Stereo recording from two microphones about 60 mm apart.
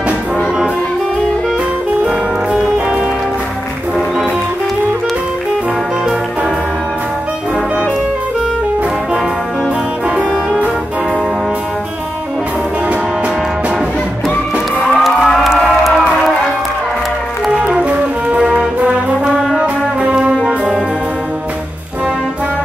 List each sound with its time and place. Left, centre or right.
2.0 s music: centre
10.0 s brass instrument: centre
14.9 s music: centre
17.5 s brass instrument: centre
19.3 s brass instrument: centre
19.6 s music: centre
20.3 s brass instrument: centre